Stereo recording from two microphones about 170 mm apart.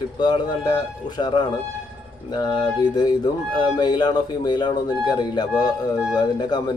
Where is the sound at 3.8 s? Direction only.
25° left (ahead or behind).